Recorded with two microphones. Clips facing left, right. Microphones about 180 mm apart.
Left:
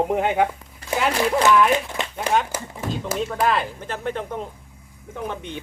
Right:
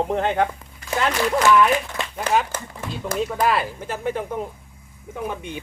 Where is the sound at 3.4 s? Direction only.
10° right (ahead or behind).